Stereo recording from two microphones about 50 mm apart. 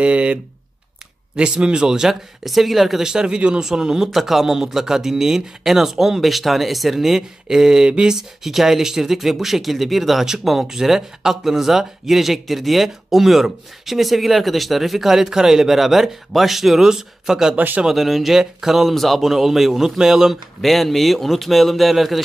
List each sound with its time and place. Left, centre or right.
0.0 s speech: right
2.4 s speech: centre
17.6 s speech: right
17.8 s speech: centre
20.6 s speech: centre